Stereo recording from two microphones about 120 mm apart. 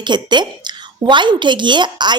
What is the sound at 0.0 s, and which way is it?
Speech, 40° right (ahead or behind).